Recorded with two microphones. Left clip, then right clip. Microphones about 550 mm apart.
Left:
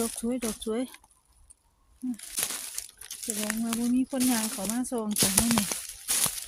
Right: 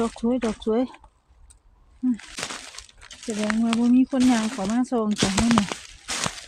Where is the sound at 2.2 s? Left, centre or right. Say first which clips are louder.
Right 3 dB; left.